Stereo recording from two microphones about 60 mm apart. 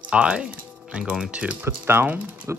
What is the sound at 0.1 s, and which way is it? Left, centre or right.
Speech, centre.